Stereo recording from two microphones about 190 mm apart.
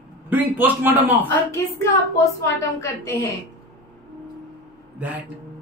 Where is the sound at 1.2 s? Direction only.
15° left (ahead or behind).